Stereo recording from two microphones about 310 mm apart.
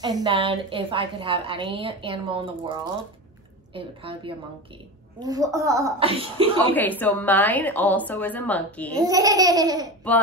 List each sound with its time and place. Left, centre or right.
0.0 s a woman's voice: centre
3.7 s a woman's voice: centre
6.7 s a woman's voice: centre
8.9 s a woman's voice: centre